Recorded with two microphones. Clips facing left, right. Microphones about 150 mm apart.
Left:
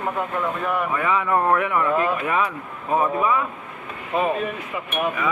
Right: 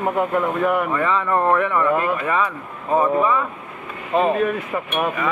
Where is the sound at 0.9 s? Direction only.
10° left (ahead or behind).